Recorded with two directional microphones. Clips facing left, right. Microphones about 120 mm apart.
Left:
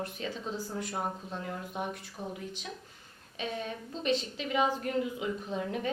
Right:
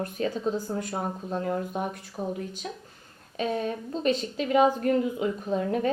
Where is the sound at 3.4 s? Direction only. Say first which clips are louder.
Right 8 dB; 45° right (ahead or behind).